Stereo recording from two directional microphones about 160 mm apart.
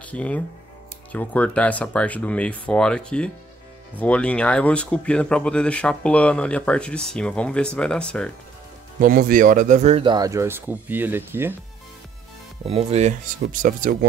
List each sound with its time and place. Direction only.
0.0 s speech: 10° left (ahead or behind)
9.0 s speech: 60° right (ahead or behind); by 10.1 s 40° right (ahead or behind)
10.1 s speech: 20° right (ahead or behind)
12.6 s speech: 40° right (ahead or behind)